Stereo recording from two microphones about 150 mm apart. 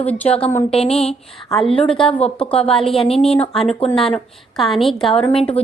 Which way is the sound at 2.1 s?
40° left (ahead or behind).